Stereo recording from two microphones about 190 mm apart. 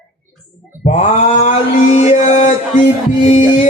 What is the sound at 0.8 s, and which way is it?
Male singing, 40° left (ahead or behind).